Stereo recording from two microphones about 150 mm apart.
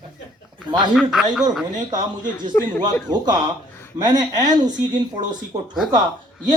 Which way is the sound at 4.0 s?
25° right (ahead or behind).